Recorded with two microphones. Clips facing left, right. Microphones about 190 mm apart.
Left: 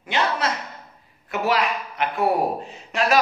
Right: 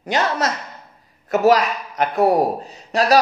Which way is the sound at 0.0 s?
40° right (ahead or behind).